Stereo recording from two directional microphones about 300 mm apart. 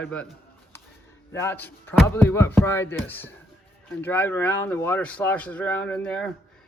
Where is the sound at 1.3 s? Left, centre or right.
Centre.